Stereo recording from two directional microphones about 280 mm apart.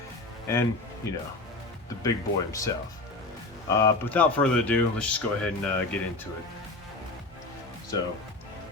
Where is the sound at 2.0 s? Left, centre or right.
Centre.